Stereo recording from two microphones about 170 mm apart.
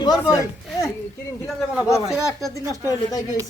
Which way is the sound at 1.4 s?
5° right (ahead or behind).